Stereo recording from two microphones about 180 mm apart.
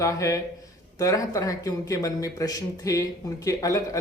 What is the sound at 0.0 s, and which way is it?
Speech, 15° left (ahead or behind).